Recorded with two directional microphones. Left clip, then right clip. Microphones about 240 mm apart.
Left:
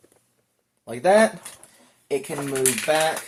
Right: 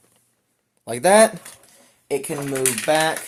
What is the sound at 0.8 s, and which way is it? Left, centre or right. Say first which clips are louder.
Speech: right 3 dB; right.